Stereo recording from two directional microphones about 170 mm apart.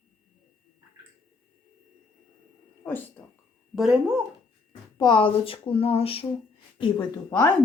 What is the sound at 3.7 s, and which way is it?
Speech, 5° right (ahead or behind).